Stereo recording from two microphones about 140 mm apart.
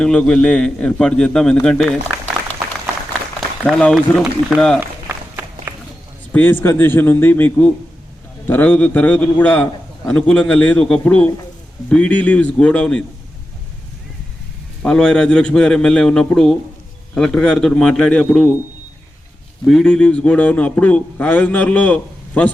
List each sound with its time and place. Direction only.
0.0 s a man's voice: 5° left (ahead or behind)
3.7 s a man's voice: 5° left (ahead or behind)
4.8 s run: 15° right (ahead or behind)
5.7 s walk: 15° right (ahead or behind)
6.3 s a man's voice: 15° left (ahead or behind)
14.8 s a man's voice: 5° left (ahead or behind)
19.6 s a man's voice: 5° left (ahead or behind)